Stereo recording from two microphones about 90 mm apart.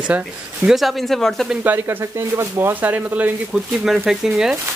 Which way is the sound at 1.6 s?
25° right (ahead or behind).